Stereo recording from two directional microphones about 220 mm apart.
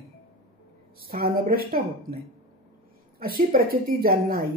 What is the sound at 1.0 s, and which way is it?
Speech, 45° right (ahead or behind).